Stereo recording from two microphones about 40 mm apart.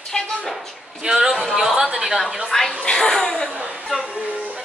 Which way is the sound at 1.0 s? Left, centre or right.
Centre.